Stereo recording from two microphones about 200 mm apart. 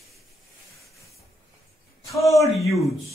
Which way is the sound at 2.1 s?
15° left (ahead or behind).